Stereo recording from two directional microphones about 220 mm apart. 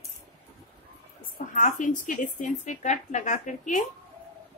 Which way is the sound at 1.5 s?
35° left (ahead or behind).